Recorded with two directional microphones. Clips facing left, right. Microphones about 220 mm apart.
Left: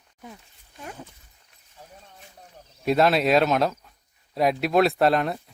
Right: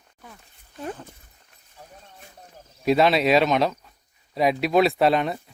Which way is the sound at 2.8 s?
Centre (ahead or behind).